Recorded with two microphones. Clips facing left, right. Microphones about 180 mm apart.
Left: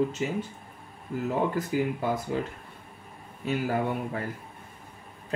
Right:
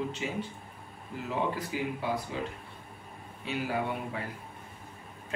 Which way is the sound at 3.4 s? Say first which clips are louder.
Left 5 dB; 45° left (ahead or behind).